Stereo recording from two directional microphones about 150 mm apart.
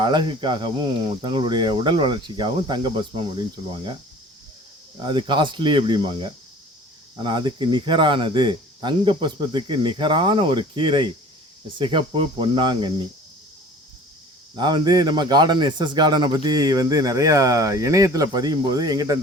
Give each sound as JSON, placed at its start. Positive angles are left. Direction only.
{"t": 0.0, "sound": "speech", "side_deg": -30}
{"t": 4.9, "sound": "speech", "side_deg": -30}
{"t": 14.5, "sound": "speech", "side_deg": -30}